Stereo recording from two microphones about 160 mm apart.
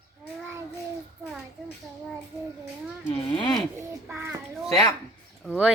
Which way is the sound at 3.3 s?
30° left (ahead or behind).